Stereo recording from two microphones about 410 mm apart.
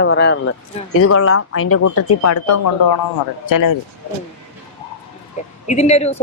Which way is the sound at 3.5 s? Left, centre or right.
Left.